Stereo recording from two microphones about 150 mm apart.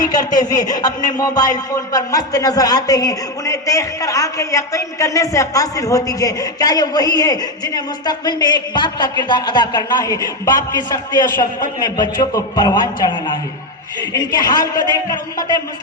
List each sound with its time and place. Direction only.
0.0 s speech: 25° left (ahead or behind)